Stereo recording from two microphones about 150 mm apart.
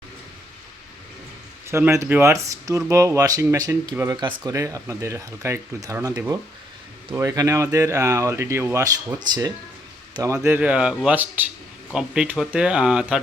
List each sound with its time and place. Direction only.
1.6 s speech: 20° right (ahead or behind)